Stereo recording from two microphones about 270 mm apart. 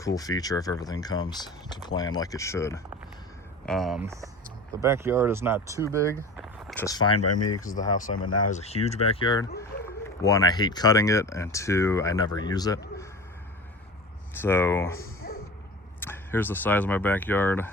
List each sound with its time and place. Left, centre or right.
0.0 s speech: centre
3.7 s speech: centre
6.3 s a sound: centre
6.8 s speech: centre
7.2 s speech: left
7.6 s speech: left; by 13.1 s centre
14.3 s speech: centre
15.2 s music: left
16.0 s speech: centre